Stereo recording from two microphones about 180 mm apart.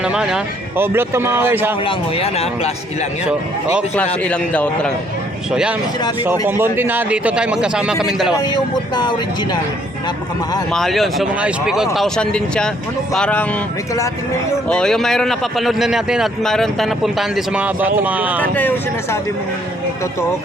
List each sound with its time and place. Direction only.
0.0 s speech: 5° right (ahead or behind)
1.8 s speech: 30° left (ahead or behind)
3.2 s speech: 5° right (ahead or behind)
3.9 s a man's voice: 10° left (ahead or behind)
5.5 s speech: 5° right (ahead or behind)
8.4 s speech: 25° left (ahead or behind)
10.7 s speech: centre (ahead or behind)
14.7 s speech: 5° left (ahead or behind)